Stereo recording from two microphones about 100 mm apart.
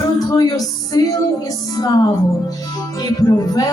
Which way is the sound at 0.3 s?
40° left (ahead or behind).